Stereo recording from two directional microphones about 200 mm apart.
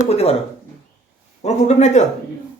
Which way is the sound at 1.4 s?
35° left (ahead or behind).